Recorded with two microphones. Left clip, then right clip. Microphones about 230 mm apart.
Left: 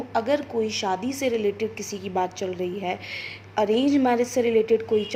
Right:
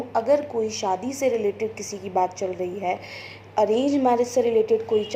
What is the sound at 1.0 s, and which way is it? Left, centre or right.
A woman's voice, left.